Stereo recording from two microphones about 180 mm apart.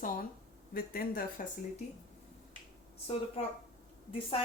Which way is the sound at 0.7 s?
55° left (ahead or behind).